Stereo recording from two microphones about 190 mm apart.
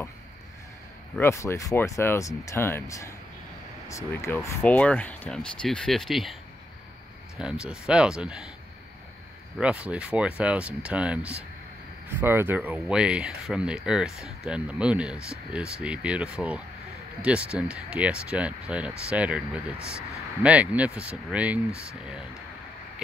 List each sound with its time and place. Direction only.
1.1 s speech: 15° left (ahead or behind)
7.3 s speech: 5° right (ahead or behind)
9.6 s speech: 5° right (ahead or behind)
20.4 s speech: 5° right (ahead or behind)